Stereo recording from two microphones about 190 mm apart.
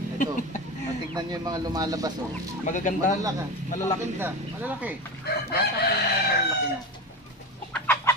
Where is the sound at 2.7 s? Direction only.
40° left (ahead or behind).